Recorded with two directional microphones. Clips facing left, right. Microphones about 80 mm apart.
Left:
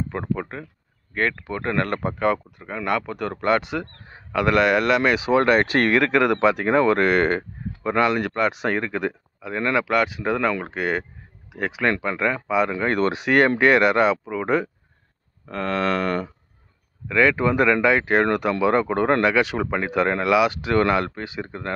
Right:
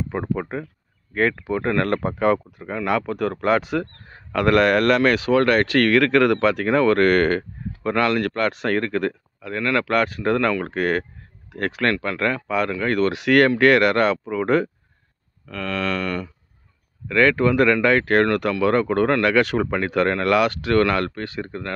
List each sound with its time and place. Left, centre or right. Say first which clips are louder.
0.1 s speech: right 2 dB; centre
9.8 s speech: right 1 dB; centre
15.4 s a sound: left 2 dB; left
17.1 s speech: right 1 dB; centre